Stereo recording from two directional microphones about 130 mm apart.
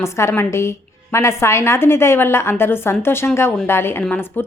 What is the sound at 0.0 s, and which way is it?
A woman's voice, 20° left (ahead or behind).